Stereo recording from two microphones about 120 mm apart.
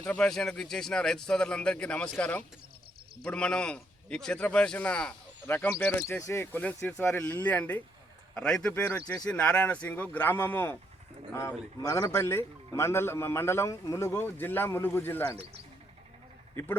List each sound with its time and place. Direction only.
0.0 s a man's voice: 10° left (ahead or behind)
8.7 s a man's voice: 15° left (ahead or behind)
9.2 s a man's voice: 10° left (ahead or behind)